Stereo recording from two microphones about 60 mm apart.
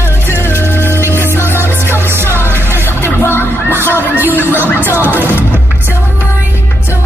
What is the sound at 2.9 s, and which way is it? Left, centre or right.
Music, left.